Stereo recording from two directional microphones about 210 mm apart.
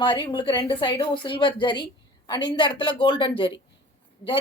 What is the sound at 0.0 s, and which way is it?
A woman's voice, 25° left (ahead or behind).